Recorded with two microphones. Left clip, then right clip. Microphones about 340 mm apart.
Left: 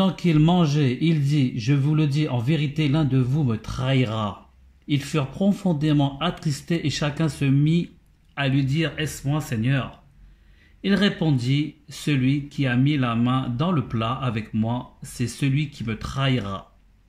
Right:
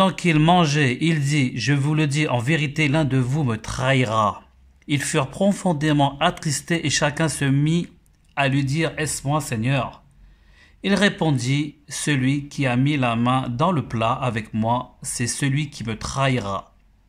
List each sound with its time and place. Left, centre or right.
0.0 s a man's voice: right